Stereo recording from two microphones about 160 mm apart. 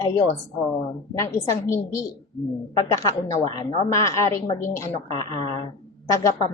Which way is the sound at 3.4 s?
25° left (ahead or behind).